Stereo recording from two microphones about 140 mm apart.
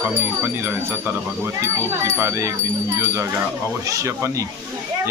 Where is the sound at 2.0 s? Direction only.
20° right (ahead or behind).